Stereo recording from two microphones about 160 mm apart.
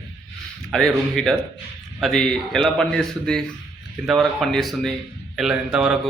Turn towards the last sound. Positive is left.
turn(degrees=-5)  # may be behind; listen again after turning